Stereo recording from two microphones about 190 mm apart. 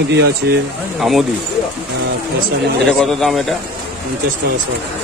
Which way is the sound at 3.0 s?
Centre (ahead or behind).